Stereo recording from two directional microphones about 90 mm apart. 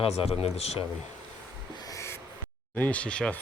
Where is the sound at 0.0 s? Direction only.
90° left.